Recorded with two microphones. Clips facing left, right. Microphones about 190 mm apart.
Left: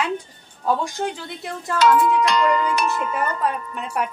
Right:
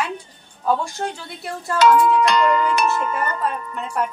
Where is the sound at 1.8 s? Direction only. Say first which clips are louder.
Right 2 dB; 55° right (ahead or behind).